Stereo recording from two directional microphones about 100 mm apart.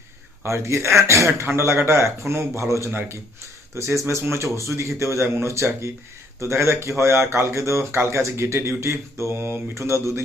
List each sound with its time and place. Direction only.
0.4 s speech: 30° right (ahead or behind)